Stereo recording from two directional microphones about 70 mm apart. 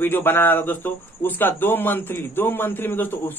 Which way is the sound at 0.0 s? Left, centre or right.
Left.